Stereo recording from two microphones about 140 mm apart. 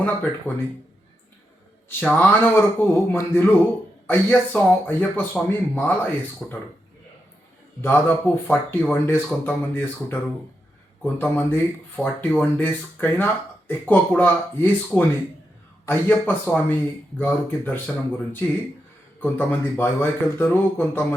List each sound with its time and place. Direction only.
0.0 s speech: 10° left (ahead or behind)
1.9 s speech: 10° left (ahead or behind)
7.8 s speech: 15° left (ahead or behind)